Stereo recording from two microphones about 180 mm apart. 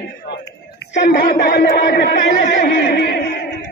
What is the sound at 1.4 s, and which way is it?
Speech, 60° left (ahead or behind).